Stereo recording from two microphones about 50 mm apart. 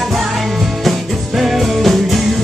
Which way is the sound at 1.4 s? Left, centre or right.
Centre.